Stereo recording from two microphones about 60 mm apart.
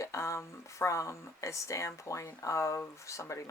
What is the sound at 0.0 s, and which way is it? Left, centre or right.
Speech, left.